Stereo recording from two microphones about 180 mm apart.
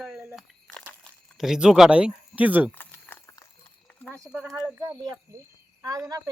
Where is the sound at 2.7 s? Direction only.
10° left (ahead or behind).